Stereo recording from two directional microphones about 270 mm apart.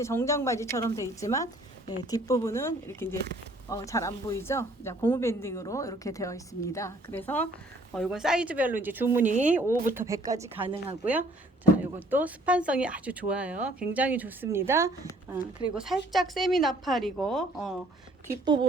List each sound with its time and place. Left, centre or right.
0.0 s speech: centre
9.2 s speech: right
9.9 s speech: centre
18.3 s speech: centre